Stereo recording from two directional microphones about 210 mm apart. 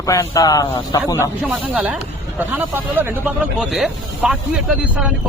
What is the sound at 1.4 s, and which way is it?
Speech, 5° right (ahead or behind).